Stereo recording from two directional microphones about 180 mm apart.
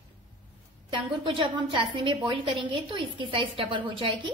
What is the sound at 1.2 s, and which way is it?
A woman's voice, 30° right (ahead or behind).